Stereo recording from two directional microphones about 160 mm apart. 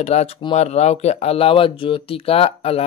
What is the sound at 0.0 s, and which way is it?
Speech, 40° left (ahead or behind).